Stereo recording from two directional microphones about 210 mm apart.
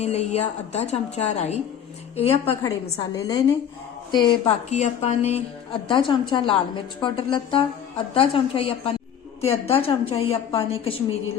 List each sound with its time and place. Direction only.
0.0 s a woman's voice: 30° left (ahead or behind)
2.4 s a woman's voice: 10° left (ahead or behind); by 11.2 s 25° left (ahead or behind)